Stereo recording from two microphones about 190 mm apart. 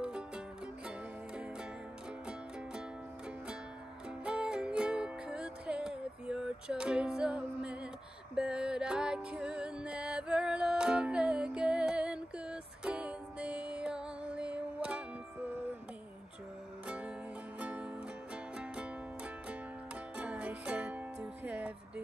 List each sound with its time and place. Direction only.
4.2 s music: 5° right (ahead or behind)
16.8 s music: 5° right (ahead or behind)
20.2 s music: 5° right (ahead or behind)